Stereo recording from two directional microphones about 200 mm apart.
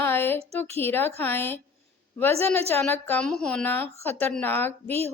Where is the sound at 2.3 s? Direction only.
30° right (ahead or behind).